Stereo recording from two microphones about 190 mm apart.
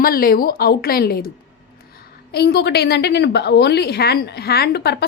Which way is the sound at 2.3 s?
55° left (ahead or behind).